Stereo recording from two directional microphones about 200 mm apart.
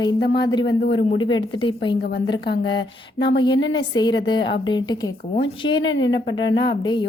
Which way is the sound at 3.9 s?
20° left (ahead or behind).